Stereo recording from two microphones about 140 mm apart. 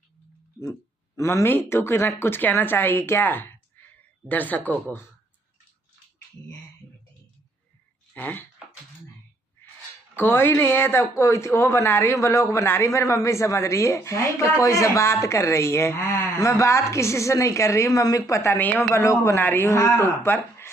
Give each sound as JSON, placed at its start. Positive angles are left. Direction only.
{"t": 0.6, "sound": "speech", "side_deg": 20}
{"t": 8.1, "sound": "speech", "side_deg": 15}
{"t": 10.2, "sound": "speech", "side_deg": 15}